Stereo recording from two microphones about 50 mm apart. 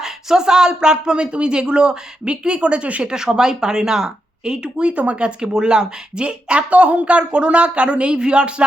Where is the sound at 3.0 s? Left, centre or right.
Centre.